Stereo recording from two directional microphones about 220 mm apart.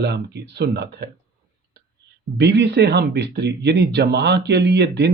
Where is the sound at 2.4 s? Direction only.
50° right (ahead or behind).